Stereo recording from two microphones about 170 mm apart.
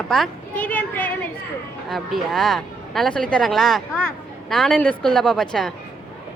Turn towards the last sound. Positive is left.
turn(degrees=0)  # may be behind; listen again after turning